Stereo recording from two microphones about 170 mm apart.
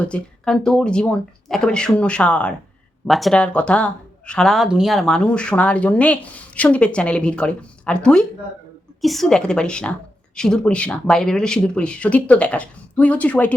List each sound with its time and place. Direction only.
0.0 s speech: 5° left (ahead or behind)